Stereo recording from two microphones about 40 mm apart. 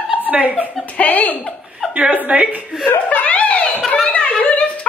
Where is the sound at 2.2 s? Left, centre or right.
Right.